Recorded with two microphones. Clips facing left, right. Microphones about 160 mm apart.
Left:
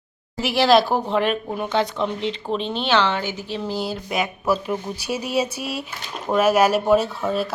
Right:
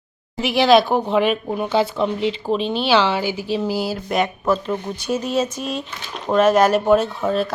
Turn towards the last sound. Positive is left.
turn(degrees=5)  # may be behind; listen again after turning